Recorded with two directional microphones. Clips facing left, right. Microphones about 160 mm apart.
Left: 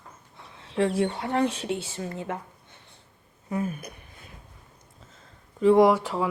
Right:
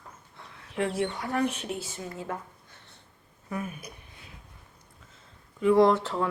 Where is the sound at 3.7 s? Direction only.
50° left (ahead or behind).